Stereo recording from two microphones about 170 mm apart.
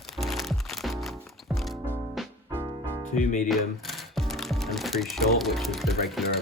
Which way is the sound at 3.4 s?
Centre (ahead or behind).